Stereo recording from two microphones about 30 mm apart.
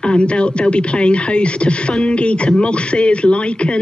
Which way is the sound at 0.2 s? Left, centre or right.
Left.